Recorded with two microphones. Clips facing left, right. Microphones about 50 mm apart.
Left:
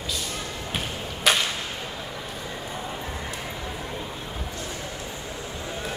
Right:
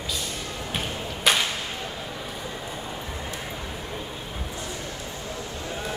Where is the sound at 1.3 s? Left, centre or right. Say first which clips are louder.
Even; centre.